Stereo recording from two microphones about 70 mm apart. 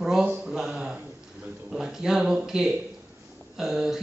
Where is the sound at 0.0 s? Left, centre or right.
Centre.